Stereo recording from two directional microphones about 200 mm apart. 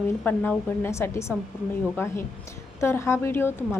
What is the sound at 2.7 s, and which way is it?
A woman's voice, 15° left (ahead or behind).